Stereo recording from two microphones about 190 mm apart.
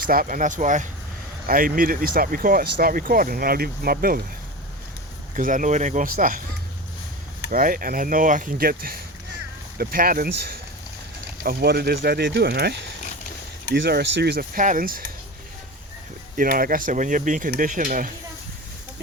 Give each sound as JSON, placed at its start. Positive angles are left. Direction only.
{"t": 0.0, "sound": "speech", "side_deg": -50}
{"t": 5.3, "sound": "speech", "side_deg": -45}
{"t": 7.5, "sound": "speech", "side_deg": -50}
{"t": 16.4, "sound": "speech", "side_deg": -45}